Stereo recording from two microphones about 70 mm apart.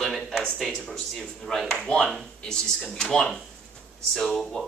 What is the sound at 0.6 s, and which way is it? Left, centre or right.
A man's voice, centre.